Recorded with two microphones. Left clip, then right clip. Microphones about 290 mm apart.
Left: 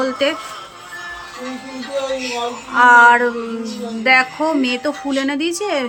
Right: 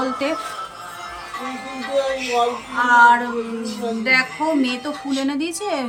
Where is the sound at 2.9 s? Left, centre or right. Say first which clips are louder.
Left 3 dB; centre.